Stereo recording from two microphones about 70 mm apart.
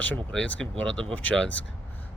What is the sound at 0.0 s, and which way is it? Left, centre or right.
Speech, left.